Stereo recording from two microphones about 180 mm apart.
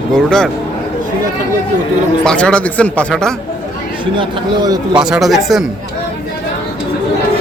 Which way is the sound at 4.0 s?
25° right (ahead or behind).